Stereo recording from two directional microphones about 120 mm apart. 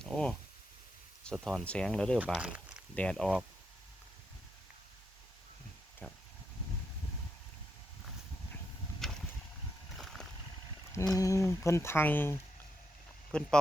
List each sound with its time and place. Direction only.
0.0 s a sound: 5° left (ahead or behind)
1.2 s speech: 5° left (ahead or behind)
2.1 s speech: 10° right (ahead or behind)
2.9 s speech: 10° left (ahead or behind)
6.0 s a sound: 10° left (ahead or behind)
9.0 s a sound: centre (ahead or behind)
10.0 s vehicle: centre (ahead or behind)
11.1 s speech: 25° left (ahead or behind)
13.3 s speech: 5° left (ahead or behind)